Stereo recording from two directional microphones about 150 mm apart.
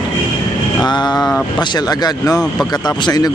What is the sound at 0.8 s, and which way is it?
Speech, 30° left (ahead or behind).